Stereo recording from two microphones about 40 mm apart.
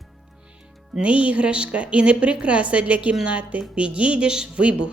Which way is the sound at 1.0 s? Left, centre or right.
Right.